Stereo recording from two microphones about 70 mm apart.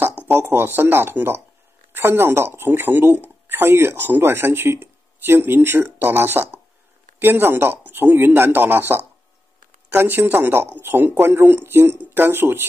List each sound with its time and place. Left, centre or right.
0.3 s speech: right